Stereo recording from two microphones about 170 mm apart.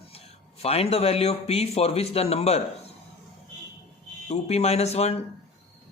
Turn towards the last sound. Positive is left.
turn(degrees=40)  # may be behind; listen again after turning